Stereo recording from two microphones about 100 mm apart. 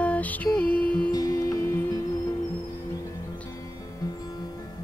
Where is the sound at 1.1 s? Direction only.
35° left (ahead or behind).